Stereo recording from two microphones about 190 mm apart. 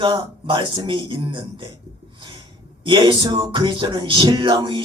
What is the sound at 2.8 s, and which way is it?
A man's voice, 25° right (ahead or behind).